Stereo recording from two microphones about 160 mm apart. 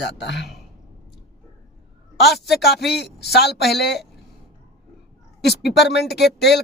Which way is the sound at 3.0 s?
90° left.